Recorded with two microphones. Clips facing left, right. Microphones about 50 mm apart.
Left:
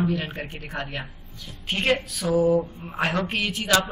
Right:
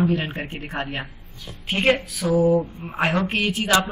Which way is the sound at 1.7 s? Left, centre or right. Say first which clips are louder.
Right 3 dB; centre.